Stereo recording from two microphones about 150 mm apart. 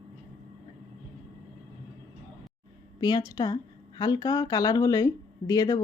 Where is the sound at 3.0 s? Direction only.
25° left (ahead or behind).